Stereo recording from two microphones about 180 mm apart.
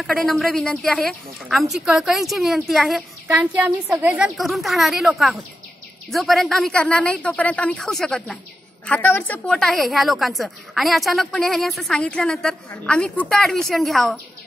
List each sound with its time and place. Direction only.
0.0 s a woman's voice: centre (ahead or behind)